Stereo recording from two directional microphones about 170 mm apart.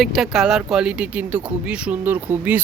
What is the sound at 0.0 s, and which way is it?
Speech, centre (ahead or behind).